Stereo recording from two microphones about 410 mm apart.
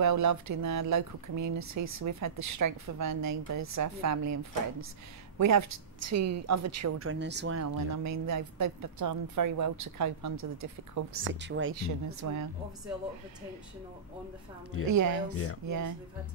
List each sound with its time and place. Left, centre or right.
0.0 s a woman's voice: right
7.6 s speech: right
11.2 s speech: right
12.1 s speech: right
14.9 s speech: right